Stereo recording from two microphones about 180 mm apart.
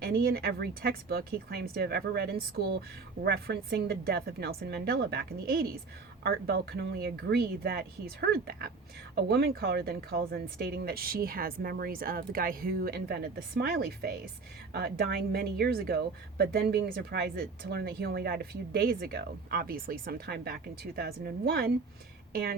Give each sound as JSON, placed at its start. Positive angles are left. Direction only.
{"t": 0.0, "sound": "a woman's voice", "side_deg": -55}